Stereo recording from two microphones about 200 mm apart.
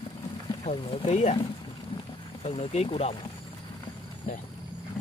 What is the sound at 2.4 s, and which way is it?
Mantra, 30° left (ahead or behind).